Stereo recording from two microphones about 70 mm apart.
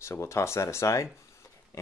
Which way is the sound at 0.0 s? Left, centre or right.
Left.